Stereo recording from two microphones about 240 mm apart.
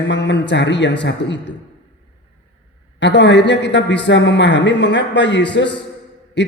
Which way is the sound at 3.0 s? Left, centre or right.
Left.